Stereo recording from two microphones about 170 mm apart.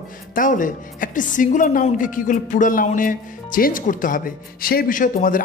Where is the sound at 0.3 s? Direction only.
50° left (ahead or behind).